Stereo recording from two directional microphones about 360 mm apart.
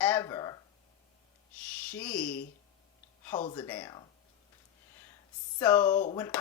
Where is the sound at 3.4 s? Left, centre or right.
Centre.